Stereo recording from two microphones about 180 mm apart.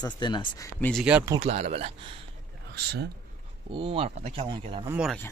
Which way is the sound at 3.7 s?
30° right (ahead or behind).